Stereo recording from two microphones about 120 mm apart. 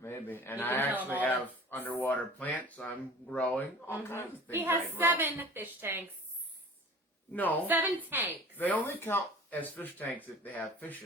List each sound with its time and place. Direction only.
0.0 s a man's voice: 20° left (ahead or behind)
0.9 s a woman's voice: 15° right (ahead or behind)
1.2 s speech: 15° left (ahead or behind)
4.5 s a woman's voice: 15° right (ahead or behind)
7.3 s speech: 15° left (ahead or behind)
8.1 s a woman's voice: 20° right (ahead or behind)
8.5 s speech: 15° left (ahead or behind)